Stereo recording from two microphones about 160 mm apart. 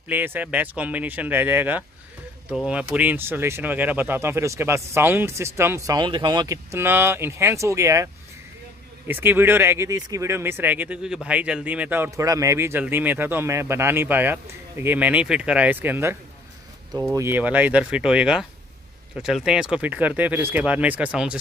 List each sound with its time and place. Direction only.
0.1 s speech: 10° right (ahead or behind)